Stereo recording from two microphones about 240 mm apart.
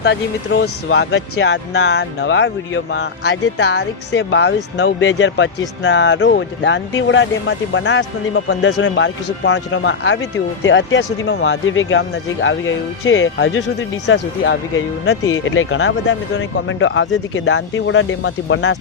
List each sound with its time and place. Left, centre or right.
0.0 s speech: left
15.4 s speech: left